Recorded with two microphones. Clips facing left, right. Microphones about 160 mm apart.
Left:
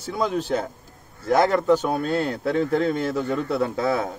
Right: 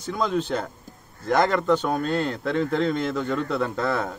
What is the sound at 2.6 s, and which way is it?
Speech, 40° left (ahead or behind).